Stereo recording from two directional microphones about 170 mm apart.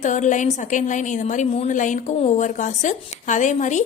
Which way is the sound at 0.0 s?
45° left (ahead or behind).